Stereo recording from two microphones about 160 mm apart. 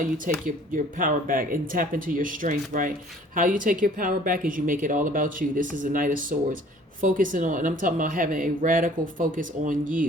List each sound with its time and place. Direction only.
0.0 s speech: 60° right (ahead or behind)